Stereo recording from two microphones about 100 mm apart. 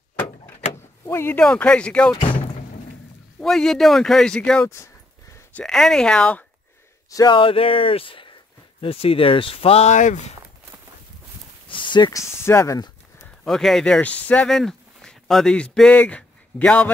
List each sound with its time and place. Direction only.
1.0 s speech: 25° left (ahead or behind)
1.4 s speech: 10° left (ahead or behind)
2.1 s speech: 55° left (ahead or behind)
3.3 s speech: 5° left (ahead or behind)
4.6 s speech: 30° left (ahead or behind)
5.6 s speech: 5° left (ahead or behind)
7.1 s speech: 40° left (ahead or behind)
7.3 s speech: 65° left (ahead or behind)
8.8 s speech: 70° left (ahead or behind)
11.7 s a sound: 50° left (ahead or behind)
12.1 s speech: 30° left (ahead or behind)
13.2 s a man's voice: 5° left (ahead or behind)